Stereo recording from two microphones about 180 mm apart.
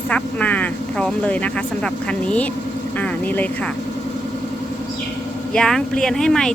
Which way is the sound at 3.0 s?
10° left (ahead or behind).